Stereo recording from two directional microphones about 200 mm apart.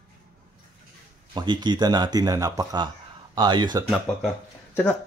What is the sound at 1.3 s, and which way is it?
Speech, 20° right (ahead or behind).